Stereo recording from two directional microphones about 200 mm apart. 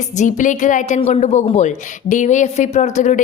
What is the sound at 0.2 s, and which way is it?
A woman's voice, 40° left (ahead or behind).